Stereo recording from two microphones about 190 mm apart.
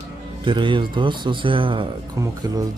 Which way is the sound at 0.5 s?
25° right (ahead or behind).